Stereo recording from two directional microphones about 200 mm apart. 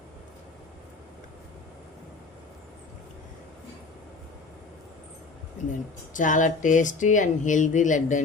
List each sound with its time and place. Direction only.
6.1 s speech: 40° left (ahead or behind)